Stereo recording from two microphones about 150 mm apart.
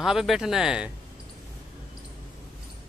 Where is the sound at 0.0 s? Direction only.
Centre (ahead or behind).